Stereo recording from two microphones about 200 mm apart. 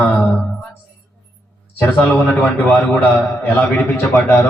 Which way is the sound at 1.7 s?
10° left (ahead or behind).